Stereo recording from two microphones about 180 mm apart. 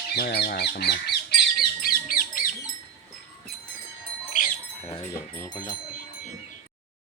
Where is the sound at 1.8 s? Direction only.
50° left (ahead or behind).